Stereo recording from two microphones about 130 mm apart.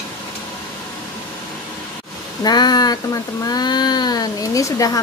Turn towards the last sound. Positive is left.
turn(degrees=25)  # may be behind; listen again after turning